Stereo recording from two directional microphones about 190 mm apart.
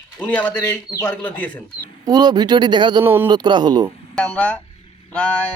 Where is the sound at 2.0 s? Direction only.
20° right (ahead or behind).